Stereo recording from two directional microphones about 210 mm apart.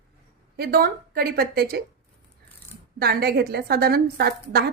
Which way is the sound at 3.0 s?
50° right (ahead or behind).